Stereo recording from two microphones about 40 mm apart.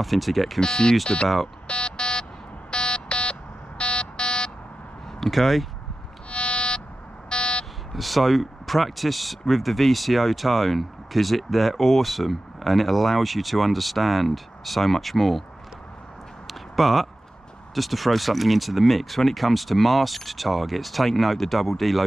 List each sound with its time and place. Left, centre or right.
0.0 s speech: centre
0.6 s speech: centre
1.0 s speech: left
1.7 s a sound: left
2.7 s buzzer: left
5.2 s speech: centre
6.3 s a sound: left
7.2 s buzzer: left
7.9 s speech: centre
16.4 s a sound: centre
17.7 s speech: centre